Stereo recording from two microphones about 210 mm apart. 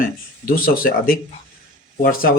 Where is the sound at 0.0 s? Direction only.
40° left (ahead or behind).